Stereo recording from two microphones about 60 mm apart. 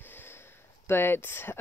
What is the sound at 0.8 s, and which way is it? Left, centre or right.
Speech, left.